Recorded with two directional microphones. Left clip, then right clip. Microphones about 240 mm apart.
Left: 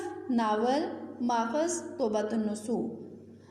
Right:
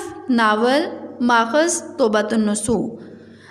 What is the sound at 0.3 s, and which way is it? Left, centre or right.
A woman's voice, right.